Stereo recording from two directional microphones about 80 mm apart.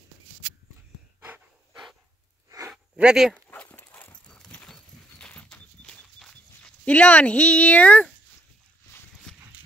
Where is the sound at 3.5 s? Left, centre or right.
Left.